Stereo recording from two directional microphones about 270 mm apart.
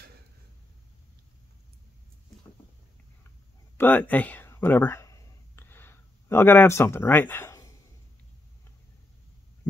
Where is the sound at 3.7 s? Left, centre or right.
Centre.